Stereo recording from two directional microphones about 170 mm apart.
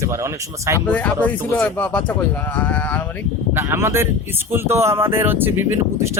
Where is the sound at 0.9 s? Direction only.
10° left (ahead or behind).